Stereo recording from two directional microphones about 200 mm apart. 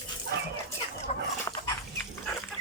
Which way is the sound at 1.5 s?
20° left (ahead or behind).